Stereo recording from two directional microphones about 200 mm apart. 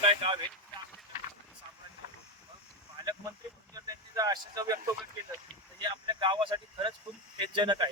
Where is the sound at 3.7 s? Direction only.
20° right (ahead or behind).